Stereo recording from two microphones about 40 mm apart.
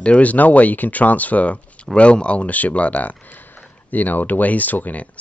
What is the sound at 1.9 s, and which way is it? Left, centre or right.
Speech, left.